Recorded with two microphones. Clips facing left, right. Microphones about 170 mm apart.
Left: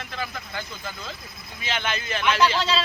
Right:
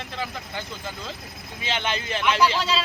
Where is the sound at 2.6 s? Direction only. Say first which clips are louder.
Left 1 dB; 10° right (ahead or behind).